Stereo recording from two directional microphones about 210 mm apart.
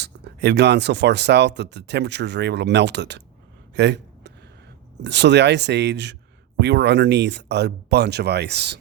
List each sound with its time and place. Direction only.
0.0 s speech: 55° right (ahead or behind)
3.8 s a sound: 55° right (ahead or behind)
5.0 s speech: 55° right (ahead or behind)